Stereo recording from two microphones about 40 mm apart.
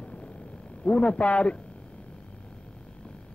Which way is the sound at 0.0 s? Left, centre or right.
Left.